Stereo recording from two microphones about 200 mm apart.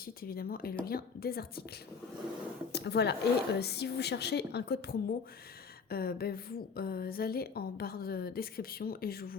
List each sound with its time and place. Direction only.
0.0 s a woman's voice: 50° left (ahead or behind)
2.7 s a woman's voice: 55° left (ahead or behind)